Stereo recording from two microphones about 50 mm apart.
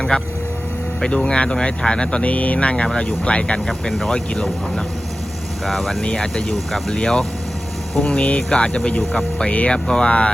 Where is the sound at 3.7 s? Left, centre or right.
Centre.